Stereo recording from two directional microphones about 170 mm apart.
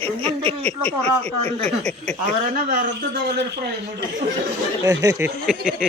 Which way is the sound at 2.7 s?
80° right.